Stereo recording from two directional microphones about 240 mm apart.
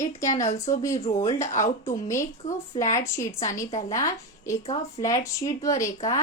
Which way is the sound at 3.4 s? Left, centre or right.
Left.